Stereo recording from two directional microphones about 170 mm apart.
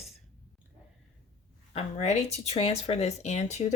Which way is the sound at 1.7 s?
40° left (ahead or behind).